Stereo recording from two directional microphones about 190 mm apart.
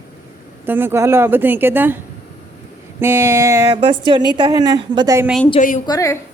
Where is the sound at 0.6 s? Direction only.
10° right (ahead or behind).